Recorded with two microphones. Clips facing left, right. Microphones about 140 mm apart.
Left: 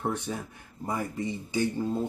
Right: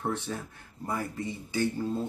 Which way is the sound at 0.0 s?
15° left (ahead or behind).